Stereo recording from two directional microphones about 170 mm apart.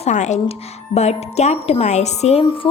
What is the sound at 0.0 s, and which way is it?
A woman's voice, 45° left (ahead or behind).